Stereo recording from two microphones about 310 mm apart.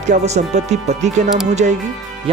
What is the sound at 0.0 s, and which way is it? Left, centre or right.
Speech, right.